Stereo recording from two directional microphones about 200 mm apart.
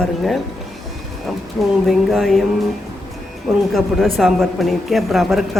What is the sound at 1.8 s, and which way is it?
Speech, centre (ahead or behind).